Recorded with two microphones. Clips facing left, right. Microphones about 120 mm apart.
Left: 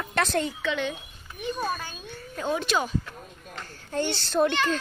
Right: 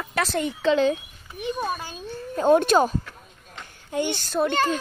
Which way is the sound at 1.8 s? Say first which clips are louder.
Right 5 dB; 30° right (ahead or behind).